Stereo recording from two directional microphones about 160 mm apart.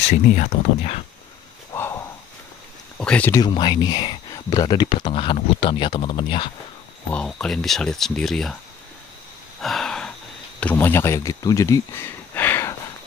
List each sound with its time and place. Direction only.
0.1 s speech: 45° left (ahead or behind)
1.7 s snort: 20° left (ahead or behind)
3.0 s speech: 10° left (ahead or behind)
3.3 s speech: 30° left (ahead or behind)
7.2 s speech: 5° left (ahead or behind)
9.6 s a sound: centre (ahead or behind)
10.6 s speech: 10° left (ahead or behind)